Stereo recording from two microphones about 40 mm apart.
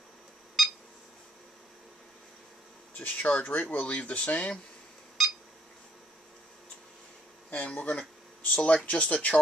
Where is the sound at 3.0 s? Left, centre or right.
Left.